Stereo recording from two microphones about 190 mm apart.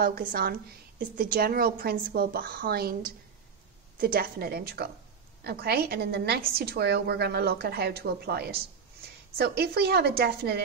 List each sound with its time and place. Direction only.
0.0 s a woman's voice: 50° right (ahead or behind)